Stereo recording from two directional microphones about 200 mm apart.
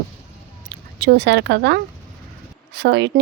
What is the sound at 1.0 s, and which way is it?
A woman's voice, 55° right (ahead or behind).